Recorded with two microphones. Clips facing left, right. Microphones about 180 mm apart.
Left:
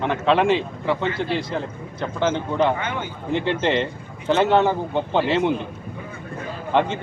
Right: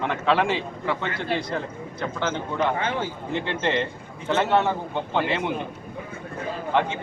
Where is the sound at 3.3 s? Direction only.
20° left (ahead or behind).